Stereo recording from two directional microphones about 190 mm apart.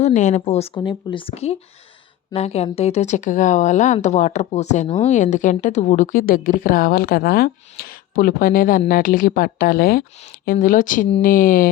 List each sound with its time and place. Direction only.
0.0 s a woman's voice: 40° left (ahead or behind)